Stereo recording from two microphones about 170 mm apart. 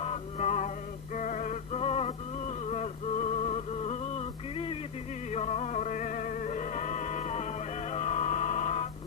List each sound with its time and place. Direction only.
0.0 s music: 40° left (ahead or behind)